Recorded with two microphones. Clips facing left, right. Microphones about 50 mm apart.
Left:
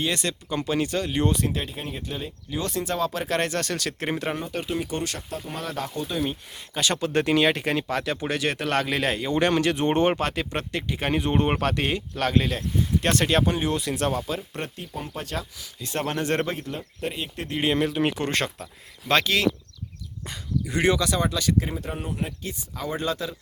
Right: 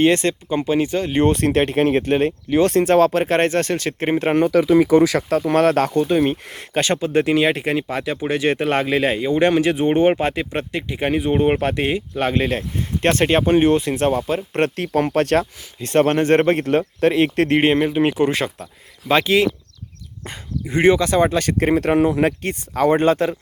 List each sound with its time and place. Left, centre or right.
0.0 s speech: right
1.4 s speech: right
5.3 s speech: right
6.1 s speech: right
6.9 s speech: centre; by 14.6 s right
14.6 s speech: right
16.1 s speech: right
16.6 s speech: right
17.6 s speech: right
20.2 s speech: right
22.4 s speech: right